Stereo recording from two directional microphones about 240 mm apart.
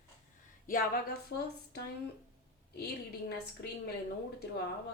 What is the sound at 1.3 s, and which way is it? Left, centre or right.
Speech, left.